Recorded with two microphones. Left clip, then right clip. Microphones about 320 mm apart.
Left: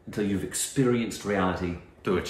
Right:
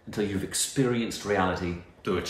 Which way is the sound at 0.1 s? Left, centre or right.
Centre.